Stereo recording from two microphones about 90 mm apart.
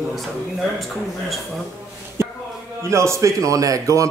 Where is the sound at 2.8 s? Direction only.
30° right (ahead or behind).